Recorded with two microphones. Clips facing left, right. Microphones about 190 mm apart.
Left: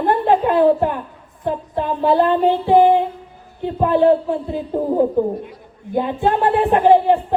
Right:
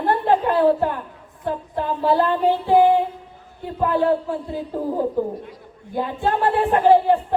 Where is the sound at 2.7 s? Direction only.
20° left (ahead or behind).